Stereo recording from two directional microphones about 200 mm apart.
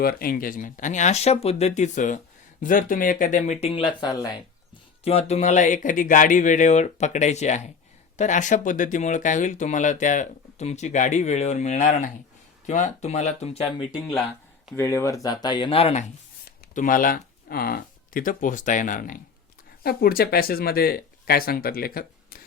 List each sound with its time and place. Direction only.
0.0 s speech: 45° left (ahead or behind); by 4.4 s 20° left (ahead or behind)
5.0 s speech: 30° left (ahead or behind)
14.8 s speech: 15° left (ahead or behind); by 16.0 s 30° left (ahead or behind)
16.7 s speech: 45° left (ahead or behind)